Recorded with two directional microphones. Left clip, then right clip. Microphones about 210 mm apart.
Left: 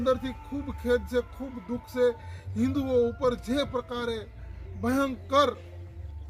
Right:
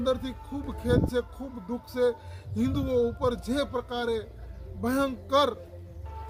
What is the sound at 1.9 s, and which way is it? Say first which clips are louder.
A man's voice: left 1 dB; 25° right (ahead or behind).